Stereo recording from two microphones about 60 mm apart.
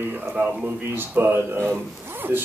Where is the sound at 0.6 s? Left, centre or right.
Right.